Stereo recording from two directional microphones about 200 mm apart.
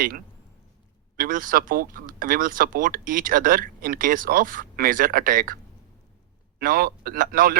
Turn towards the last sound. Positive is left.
turn(degrees=-45)  # may be behind; listen again after turning